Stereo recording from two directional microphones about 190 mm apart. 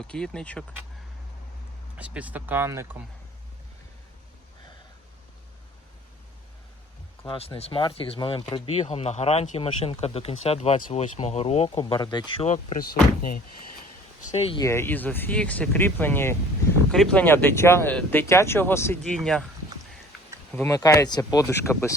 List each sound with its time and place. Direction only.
0.0 s speech: 5° left (ahead or behind)
2.0 s speech: 5° right (ahead or behind)
7.3 s speech: 30° left (ahead or behind)
12.5 s speech: 40° left (ahead or behind)
14.3 s speech: 30° left (ahead or behind)
14.6 s speech: 15° left (ahead or behind)
19.0 s speech: centre (ahead or behind)
20.7 s speech: 15° left (ahead or behind)